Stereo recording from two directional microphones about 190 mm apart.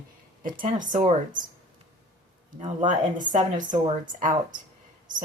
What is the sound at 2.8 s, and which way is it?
Speech, 40° right (ahead or behind).